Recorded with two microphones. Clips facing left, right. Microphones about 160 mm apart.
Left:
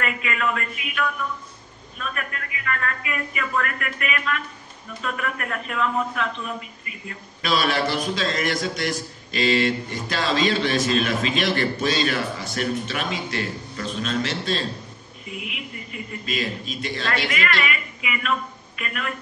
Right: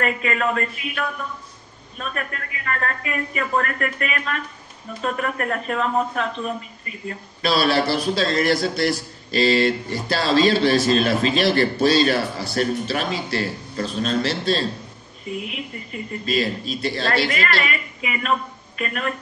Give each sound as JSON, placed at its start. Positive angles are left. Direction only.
{"t": 0.0, "sound": "a man's voice", "side_deg": -40}